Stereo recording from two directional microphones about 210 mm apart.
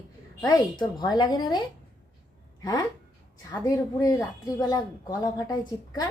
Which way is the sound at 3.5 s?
15° left (ahead or behind).